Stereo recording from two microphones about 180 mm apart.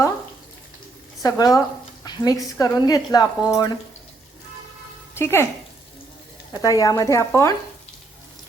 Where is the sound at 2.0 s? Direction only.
20° left (ahead or behind).